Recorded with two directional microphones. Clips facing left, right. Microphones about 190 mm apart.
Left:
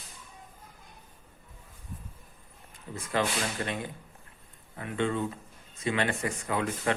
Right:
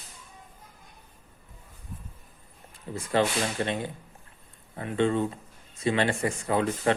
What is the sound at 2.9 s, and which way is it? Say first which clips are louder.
Speech: right 4 dB; 30° right (ahead or behind).